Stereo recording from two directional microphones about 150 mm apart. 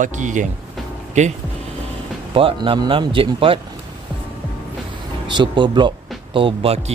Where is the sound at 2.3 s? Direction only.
35° right (ahead or behind).